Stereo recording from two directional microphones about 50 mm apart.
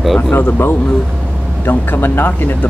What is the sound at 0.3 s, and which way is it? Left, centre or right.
Speech, left.